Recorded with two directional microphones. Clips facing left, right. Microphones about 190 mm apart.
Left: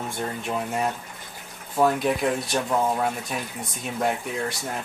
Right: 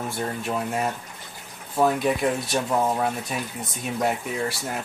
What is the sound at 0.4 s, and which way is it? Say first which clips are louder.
Speech: even; centre (ahead or behind).